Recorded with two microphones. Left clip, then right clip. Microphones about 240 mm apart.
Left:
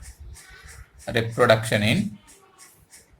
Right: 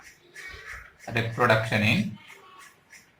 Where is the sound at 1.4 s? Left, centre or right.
Left.